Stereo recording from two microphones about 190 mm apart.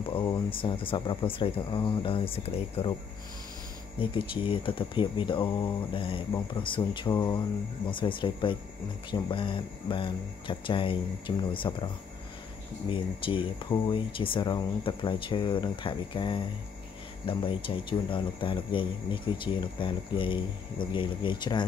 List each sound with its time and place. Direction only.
0.1 s speech: 25° left (ahead or behind)
4.0 s speech: 25° left (ahead or behind)
12.9 s speech: 25° left (ahead or behind)